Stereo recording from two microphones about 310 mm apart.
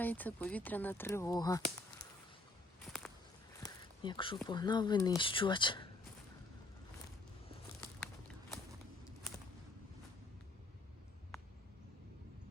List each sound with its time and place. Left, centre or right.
0.0 s speech: centre
2.8 s walk: centre
3.6 s a sound: centre
4.4 s speech: centre